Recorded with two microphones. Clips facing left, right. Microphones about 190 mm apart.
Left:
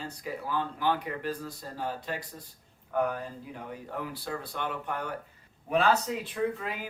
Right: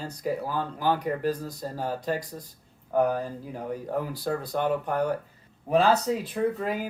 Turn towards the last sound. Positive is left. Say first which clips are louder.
# right 5 dB
turn(degrees=-40)  # may be behind; listen again after turning